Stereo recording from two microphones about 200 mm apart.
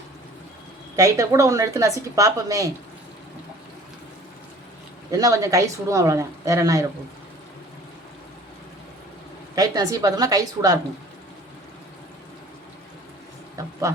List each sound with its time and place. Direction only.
0.9 s a woman's voice: 15° right (ahead or behind)
5.1 s a woman's voice: 15° right (ahead or behind)
9.6 s a woman's voice: 15° right (ahead or behind)